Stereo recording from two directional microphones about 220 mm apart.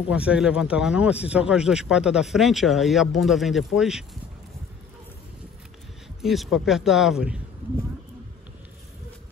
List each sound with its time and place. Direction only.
0.1 s speech: 5° right (ahead or behind)
6.2 s speech: centre (ahead or behind)